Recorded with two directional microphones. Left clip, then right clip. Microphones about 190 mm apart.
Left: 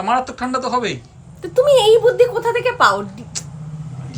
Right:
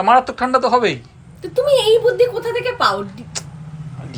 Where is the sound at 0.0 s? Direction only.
5° left (ahead or behind).